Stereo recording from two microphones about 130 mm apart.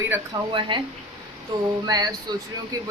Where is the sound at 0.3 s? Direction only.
35° right (ahead or behind).